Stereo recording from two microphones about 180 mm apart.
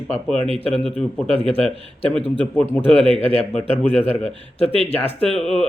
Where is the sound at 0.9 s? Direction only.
5° left (ahead or behind).